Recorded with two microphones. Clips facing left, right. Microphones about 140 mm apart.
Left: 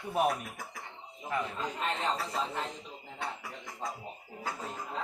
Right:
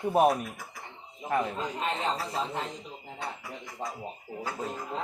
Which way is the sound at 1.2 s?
45° right (ahead or behind).